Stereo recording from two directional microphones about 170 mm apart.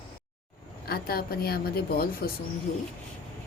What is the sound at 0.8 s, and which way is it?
Speech, 65° left (ahead or behind).